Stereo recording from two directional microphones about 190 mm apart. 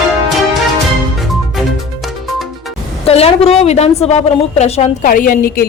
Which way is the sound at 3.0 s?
30° left (ahead or behind).